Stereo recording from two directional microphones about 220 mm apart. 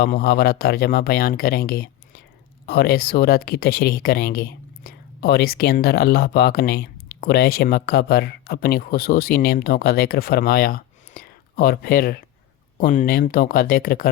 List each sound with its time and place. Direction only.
0.0 s speech: 45° left (ahead or behind)